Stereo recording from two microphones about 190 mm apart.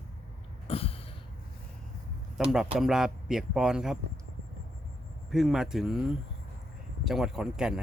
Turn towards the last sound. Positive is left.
turn(degrees=-5)  # may be behind; listen again after turning